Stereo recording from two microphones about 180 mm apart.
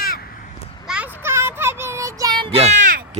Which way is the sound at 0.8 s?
5° right (ahead or behind).